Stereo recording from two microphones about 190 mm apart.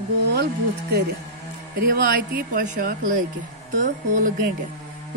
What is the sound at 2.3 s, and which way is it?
A woman's voice, 45° right (ahead or behind).